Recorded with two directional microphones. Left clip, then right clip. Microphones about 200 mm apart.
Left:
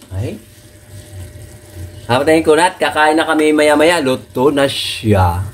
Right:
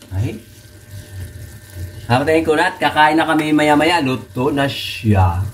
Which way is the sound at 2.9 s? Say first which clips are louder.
Left 1 dB; 35° left (ahead or behind).